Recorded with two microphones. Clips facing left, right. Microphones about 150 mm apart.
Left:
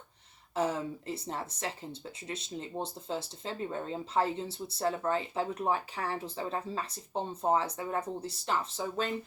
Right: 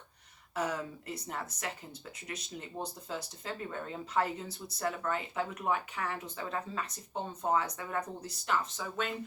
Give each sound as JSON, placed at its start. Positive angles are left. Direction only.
{"t": 0.5, "sound": "speech", "side_deg": 25}